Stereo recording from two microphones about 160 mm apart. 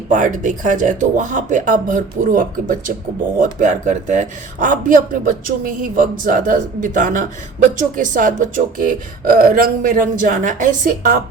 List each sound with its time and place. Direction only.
0.1 s a man's voice: 55° right (ahead or behind)